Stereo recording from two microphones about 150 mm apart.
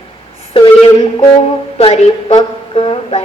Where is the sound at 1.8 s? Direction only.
45° left (ahead or behind).